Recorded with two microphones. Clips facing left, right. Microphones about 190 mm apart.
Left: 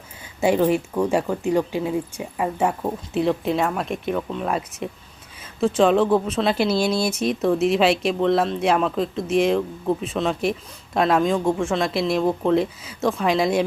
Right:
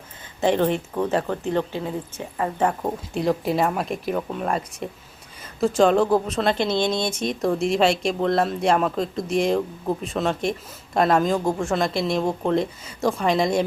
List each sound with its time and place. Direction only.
0.4 s speech: 10° left (ahead or behind)